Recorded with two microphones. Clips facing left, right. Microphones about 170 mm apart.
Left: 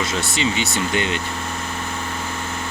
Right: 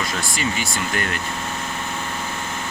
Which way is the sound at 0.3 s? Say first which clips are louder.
Left 4 dB; 25° left (ahead or behind).